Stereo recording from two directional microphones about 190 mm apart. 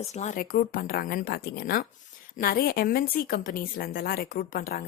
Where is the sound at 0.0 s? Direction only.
35° left (ahead or behind).